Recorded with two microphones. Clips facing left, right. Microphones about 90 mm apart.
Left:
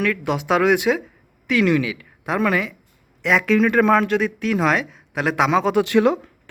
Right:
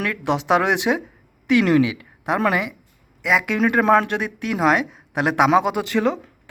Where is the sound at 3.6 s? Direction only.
25° right (ahead or behind).